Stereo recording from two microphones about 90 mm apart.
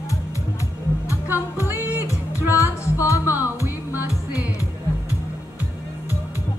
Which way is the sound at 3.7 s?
20° right (ahead or behind).